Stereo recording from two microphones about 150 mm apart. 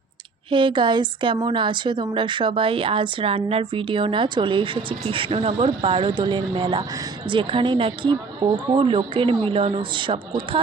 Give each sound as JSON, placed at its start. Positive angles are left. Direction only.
{"t": 0.5, "sound": "a woman's voice", "side_deg": -35}